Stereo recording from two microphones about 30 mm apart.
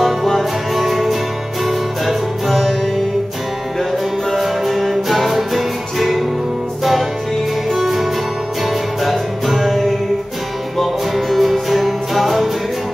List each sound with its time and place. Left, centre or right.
0.0 s music: centre
4.4 s music: centre